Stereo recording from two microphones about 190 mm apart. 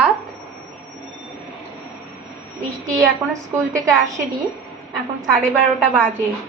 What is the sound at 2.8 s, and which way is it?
A woman's voice, 15° right (ahead or behind).